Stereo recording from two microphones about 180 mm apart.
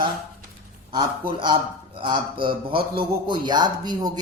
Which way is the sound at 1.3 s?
25° right (ahead or behind).